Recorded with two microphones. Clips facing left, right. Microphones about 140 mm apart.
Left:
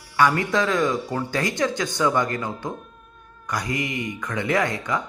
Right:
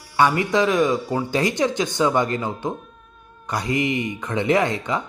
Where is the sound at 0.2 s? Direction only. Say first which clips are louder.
Right 2 dB; 20° right (ahead or behind).